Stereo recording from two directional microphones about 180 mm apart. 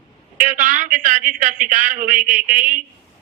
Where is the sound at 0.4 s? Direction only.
45° right (ahead or behind).